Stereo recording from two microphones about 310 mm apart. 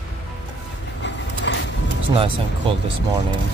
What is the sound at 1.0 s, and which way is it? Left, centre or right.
Vehicle, left.